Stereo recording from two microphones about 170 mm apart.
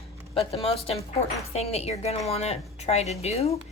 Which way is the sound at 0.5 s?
35° left (ahead or behind).